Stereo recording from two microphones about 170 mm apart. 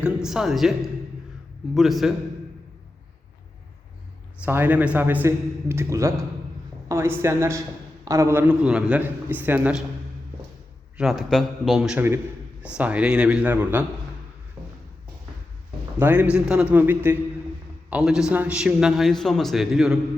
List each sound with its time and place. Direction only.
0.0 s a man's voice: 5° right (ahead or behind)
1.7 s a man's voice: centre (ahead or behind)
4.4 s a man's voice: 10° right (ahead or behind)
10.9 s a man's voice: centre (ahead or behind)
14.6 s a sound: 15° right (ahead or behind)
16.0 s a man's voice: 10° right (ahead or behind)